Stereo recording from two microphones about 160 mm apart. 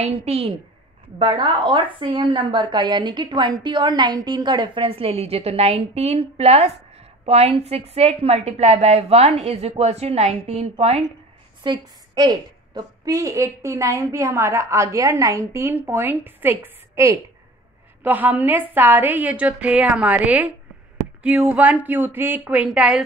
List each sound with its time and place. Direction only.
0.0 s a woman's voice: 40° right (ahead or behind)
11.6 s a woman's voice: 25° right (ahead or behind); by 23.0 s 5° right (ahead or behind)